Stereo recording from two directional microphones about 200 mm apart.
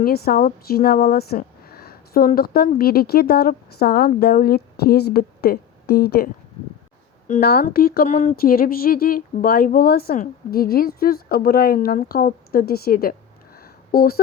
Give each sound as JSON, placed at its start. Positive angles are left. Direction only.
{"t": 0.0, "sound": "speech", "side_deg": 50}
{"t": 7.3, "sound": "speech", "side_deg": 50}